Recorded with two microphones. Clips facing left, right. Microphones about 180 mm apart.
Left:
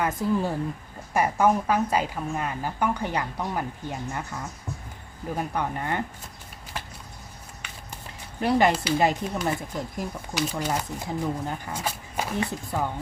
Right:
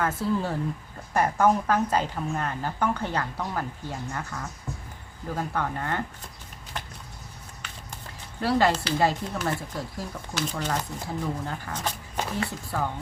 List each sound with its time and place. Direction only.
0.0 s speech: 15° left (ahead or behind)
6.8 s a sound: 5° left (ahead or behind)
8.4 s speech: 20° left (ahead or behind)